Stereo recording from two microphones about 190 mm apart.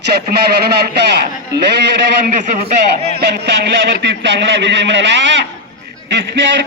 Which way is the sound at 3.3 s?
60° right (ahead or behind).